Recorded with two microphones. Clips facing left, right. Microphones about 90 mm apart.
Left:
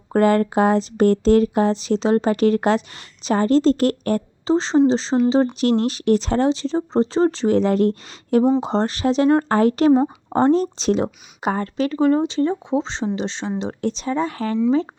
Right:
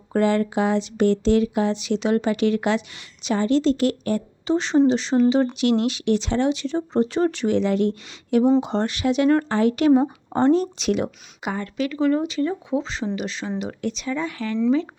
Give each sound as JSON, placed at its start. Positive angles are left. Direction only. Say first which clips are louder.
{"t": 0.1, "sound": "speech", "louder": "left 4 dB", "side_deg": 45}
{"t": 4.4, "sound": "speech", "louder": "left 2 dB", "side_deg": 30}